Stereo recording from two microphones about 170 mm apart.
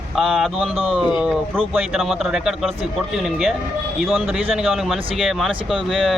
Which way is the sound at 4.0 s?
Centre (ahead or behind).